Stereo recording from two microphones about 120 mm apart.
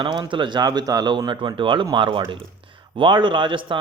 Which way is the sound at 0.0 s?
40° right (ahead or behind).